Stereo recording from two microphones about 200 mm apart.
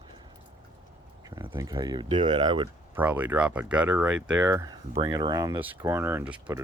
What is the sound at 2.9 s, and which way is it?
Speech, 10° right (ahead or behind).